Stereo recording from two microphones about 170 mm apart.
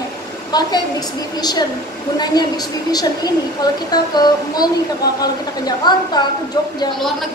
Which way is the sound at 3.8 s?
25° left (ahead or behind).